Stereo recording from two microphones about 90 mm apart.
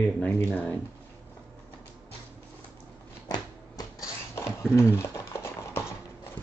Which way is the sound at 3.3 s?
45° left (ahead or behind).